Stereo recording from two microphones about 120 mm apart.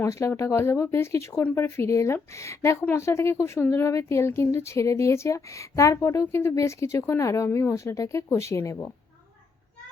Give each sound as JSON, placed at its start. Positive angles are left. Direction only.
{"t": 0.0, "sound": "speech", "side_deg": 25}